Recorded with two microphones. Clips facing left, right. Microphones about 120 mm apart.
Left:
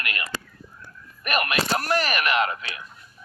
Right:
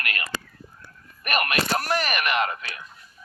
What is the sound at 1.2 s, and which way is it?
Speech, 45° right (ahead or behind).